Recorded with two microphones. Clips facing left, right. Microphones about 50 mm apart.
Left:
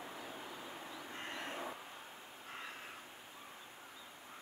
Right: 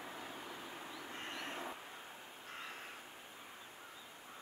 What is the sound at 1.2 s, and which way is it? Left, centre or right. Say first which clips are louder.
Vehicle: left 1 dB; left.